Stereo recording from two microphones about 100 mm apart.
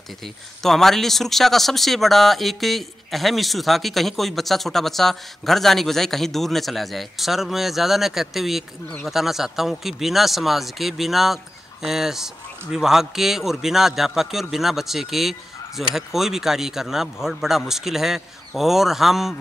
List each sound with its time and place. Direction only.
0.6 s speech: 5° left (ahead or behind)